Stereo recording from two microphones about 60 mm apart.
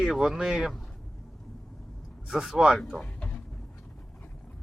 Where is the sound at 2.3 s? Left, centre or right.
Centre.